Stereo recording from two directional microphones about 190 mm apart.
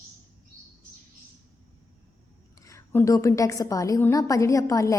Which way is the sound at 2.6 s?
15° left (ahead or behind).